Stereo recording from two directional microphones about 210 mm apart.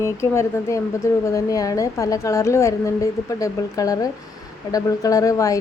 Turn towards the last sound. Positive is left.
turn(degrees=15)  # may be behind; listen again after turning